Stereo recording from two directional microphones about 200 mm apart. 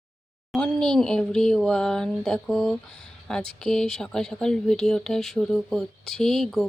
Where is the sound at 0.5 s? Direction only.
5° left (ahead or behind).